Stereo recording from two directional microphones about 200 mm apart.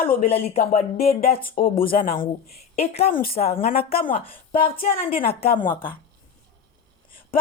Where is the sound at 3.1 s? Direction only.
45° left (ahead or behind).